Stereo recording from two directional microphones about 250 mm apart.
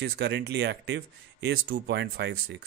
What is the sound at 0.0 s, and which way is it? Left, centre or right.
Speech, right.